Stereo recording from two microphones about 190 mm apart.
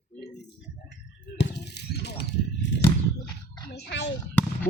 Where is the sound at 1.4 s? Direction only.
60° left (ahead or behind).